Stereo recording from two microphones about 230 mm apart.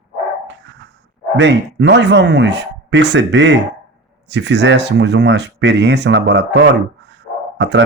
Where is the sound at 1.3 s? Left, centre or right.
Right.